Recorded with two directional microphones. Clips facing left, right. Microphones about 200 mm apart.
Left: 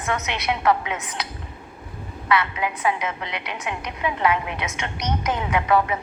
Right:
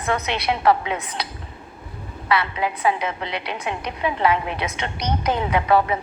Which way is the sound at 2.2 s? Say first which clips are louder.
Right 1 dB; 30° right (ahead or behind).